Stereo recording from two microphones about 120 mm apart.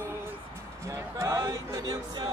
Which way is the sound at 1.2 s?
30° right (ahead or behind).